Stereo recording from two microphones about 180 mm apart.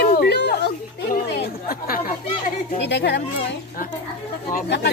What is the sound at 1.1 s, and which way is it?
Chatter, 55° left (ahead or behind).